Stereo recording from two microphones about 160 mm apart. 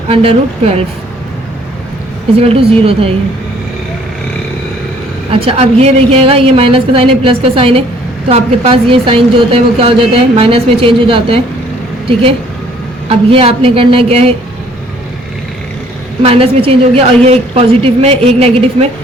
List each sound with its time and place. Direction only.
0.1 s a woman's voice: 35° right (ahead or behind)
2.4 s a woman's voice: 35° right (ahead or behind)
5.3 s a woman's voice: 35° right (ahead or behind)
13.1 s a woman's voice: 35° right (ahead or behind)
16.2 s a woman's voice: 40° right (ahead or behind)